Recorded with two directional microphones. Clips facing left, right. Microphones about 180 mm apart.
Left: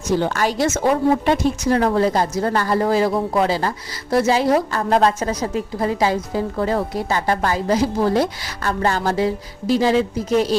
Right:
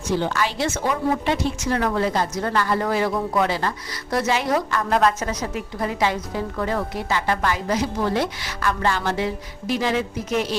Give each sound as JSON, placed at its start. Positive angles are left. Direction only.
{"t": 0.1, "sound": "a woman's voice", "side_deg": 45}